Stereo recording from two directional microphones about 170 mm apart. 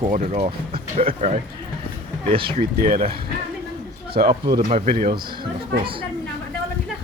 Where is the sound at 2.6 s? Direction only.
55° right (ahead or behind).